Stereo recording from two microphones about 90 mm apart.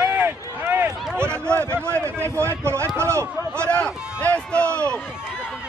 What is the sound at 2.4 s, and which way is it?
Speech, 30° right (ahead or behind).